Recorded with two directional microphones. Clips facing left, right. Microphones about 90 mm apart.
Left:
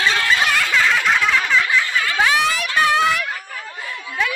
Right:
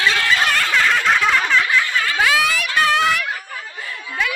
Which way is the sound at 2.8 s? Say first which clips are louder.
Left 1 dB; 20° left (ahead or behind).